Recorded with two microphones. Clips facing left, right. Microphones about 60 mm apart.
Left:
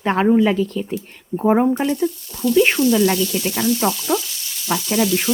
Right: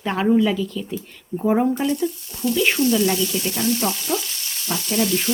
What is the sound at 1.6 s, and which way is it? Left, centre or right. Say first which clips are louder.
Sizzle: left 2 dB; left.